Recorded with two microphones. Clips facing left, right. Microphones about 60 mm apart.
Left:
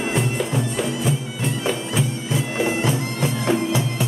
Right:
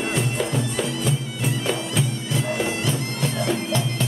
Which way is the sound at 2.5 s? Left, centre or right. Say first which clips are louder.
Left 3 dB; left.